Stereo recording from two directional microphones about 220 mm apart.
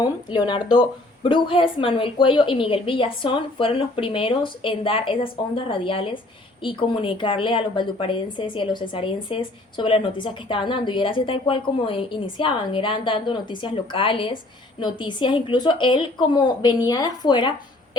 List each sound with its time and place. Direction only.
0.0 s a woman's voice: 20° left (ahead or behind)